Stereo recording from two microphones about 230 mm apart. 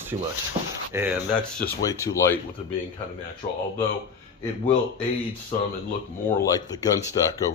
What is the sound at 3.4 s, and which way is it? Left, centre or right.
Speech, left.